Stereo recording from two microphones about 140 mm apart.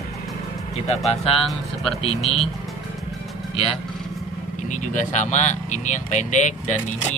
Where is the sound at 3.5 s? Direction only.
40° left (ahead or behind).